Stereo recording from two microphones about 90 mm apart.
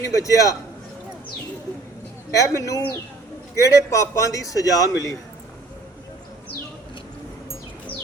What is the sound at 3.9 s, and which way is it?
Speech, 40° left (ahead or behind).